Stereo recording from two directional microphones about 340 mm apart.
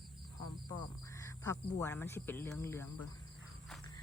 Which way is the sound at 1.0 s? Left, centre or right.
Centre.